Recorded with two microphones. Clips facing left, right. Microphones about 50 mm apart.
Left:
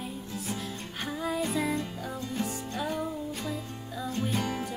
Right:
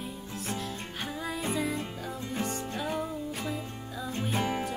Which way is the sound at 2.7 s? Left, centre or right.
Centre.